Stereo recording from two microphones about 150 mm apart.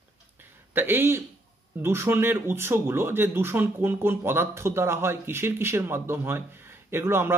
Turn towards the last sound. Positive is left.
turn(degrees=-15)  # may be behind; listen again after turning